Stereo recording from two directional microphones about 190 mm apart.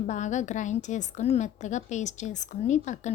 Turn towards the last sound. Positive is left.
turn(degrees=40)  # may be behind; listen again after turning